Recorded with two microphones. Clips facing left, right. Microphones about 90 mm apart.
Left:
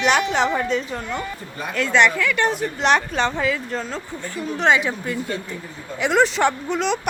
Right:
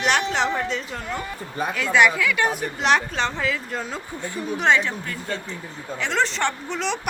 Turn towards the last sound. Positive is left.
turn(degrees=5)  # may be behind; listen again after turning